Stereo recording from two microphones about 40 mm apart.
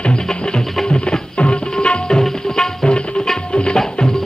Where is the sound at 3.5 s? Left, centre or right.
Left.